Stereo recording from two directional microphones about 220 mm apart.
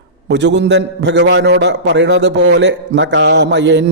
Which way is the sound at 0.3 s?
50° right (ahead or behind).